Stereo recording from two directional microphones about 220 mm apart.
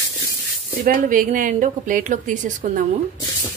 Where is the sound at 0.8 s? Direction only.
40° right (ahead or behind).